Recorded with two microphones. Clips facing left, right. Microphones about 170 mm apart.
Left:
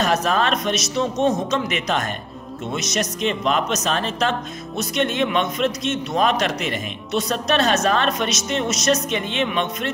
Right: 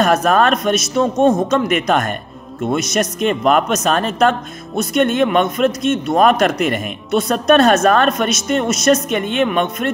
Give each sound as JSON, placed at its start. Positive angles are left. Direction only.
{"t": 0.0, "sound": "speech", "side_deg": -55}